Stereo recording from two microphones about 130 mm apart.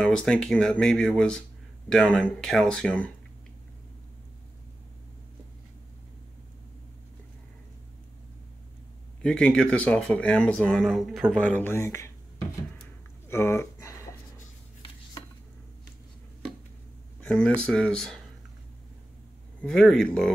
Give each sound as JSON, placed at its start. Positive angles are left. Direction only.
{"t": 0.0, "sound": "speech", "side_deg": 5}
{"t": 9.2, "sound": "speech", "side_deg": 5}
{"t": 11.3, "sound": "speech", "side_deg": 10}
{"t": 13.3, "sound": "a sound", "side_deg": 20}
{"t": 17.2, "sound": "speech", "side_deg": 10}
{"t": 19.6, "sound": "speech", "side_deg": 5}